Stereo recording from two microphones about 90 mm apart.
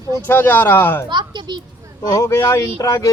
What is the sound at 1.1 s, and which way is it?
Speech, 60° right (ahead or behind).